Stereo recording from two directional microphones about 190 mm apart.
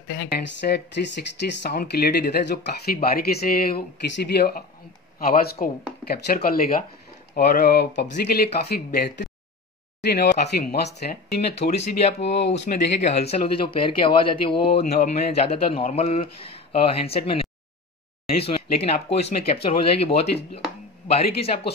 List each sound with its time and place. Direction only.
0.1 s speech: 65° left (ahead or behind)
11.3 s speech: 35° left (ahead or behind)